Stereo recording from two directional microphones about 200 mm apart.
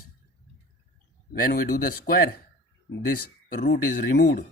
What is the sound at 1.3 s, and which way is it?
Speech, 45° left (ahead or behind).